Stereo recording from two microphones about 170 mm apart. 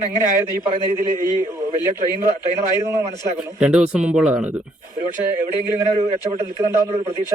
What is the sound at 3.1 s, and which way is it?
Speech, 15° right (ahead or behind).